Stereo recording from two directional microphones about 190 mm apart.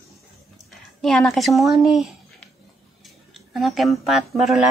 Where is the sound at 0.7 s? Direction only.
Centre (ahead or behind).